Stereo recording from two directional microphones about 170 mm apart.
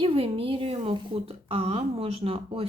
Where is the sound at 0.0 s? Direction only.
35° right (ahead or behind).